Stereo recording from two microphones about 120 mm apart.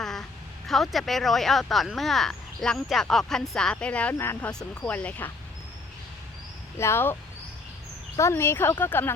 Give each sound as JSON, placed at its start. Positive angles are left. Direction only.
{"t": 0.0, "sound": "a sound", "side_deg": 5}
{"t": 0.7, "sound": "speech", "side_deg": 0}
{"t": 6.7, "sound": "speech", "side_deg": 20}